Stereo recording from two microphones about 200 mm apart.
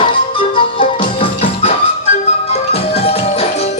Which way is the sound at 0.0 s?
25° left (ahead or behind).